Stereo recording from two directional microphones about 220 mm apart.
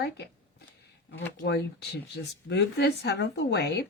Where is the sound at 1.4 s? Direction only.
50° left (ahead or behind).